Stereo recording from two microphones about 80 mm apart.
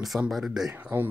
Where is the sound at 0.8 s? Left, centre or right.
Right.